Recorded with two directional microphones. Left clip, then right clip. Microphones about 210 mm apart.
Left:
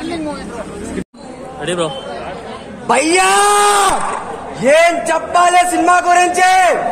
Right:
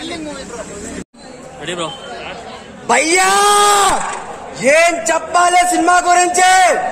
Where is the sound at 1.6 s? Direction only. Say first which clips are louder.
Left 4 dB; 15° left (ahead or behind).